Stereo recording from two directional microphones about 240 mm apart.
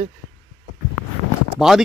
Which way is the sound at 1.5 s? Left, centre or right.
Centre.